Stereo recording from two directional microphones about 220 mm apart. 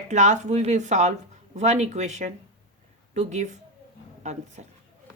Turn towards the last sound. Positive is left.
turn(degrees=-35)  # may be behind; listen again after turning